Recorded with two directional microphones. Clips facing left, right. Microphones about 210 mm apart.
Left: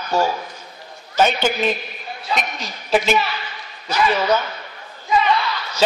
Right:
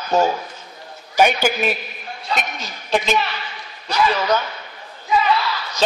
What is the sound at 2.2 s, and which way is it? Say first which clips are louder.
Speech: left 1 dB; centre (ahead or behind).